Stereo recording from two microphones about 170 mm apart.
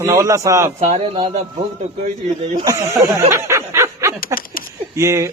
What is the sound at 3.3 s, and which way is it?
Snicker, 15° right (ahead or behind).